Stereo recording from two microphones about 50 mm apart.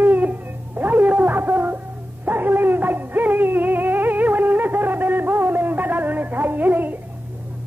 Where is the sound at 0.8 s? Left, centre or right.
Right.